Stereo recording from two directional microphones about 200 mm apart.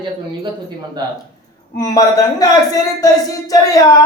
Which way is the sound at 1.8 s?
20° left (ahead or behind).